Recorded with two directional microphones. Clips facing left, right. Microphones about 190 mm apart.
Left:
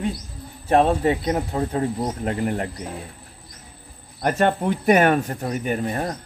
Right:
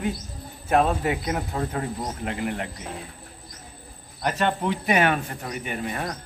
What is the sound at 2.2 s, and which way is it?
Speech, 40° left (ahead or behind).